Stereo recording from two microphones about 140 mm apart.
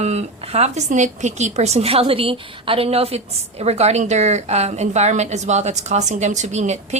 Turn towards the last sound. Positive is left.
turn(degrees=-55)  # may be behind; listen again after turning